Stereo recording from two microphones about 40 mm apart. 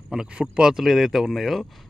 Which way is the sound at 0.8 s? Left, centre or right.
Centre.